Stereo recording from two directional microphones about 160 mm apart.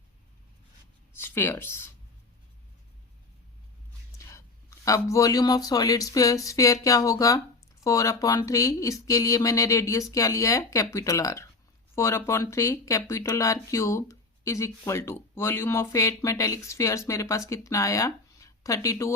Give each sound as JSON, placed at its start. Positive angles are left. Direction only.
{"t": 1.1, "sound": "speech", "side_deg": 15}
{"t": 4.9, "sound": "speech", "side_deg": 20}